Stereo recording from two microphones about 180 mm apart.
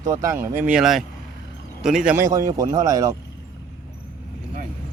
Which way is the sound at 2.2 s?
20° right (ahead or behind).